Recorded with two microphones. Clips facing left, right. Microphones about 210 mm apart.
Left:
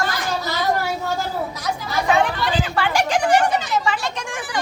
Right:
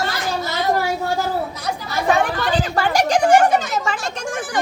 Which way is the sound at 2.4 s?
40° right (ahead or behind).